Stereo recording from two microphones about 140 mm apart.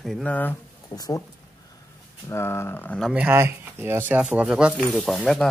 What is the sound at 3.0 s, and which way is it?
Speech, 5° right (ahead or behind).